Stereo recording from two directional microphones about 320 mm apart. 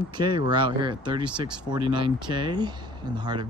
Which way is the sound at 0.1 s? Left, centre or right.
Centre.